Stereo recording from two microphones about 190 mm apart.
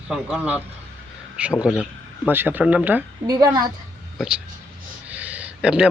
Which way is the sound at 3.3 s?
20° right (ahead or behind).